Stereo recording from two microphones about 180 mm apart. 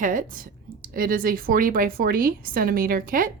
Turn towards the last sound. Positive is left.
turn(degrees=-50)  # may be behind; listen again after turning